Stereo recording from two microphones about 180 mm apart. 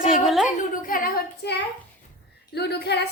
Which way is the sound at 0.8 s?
50° left (ahead or behind).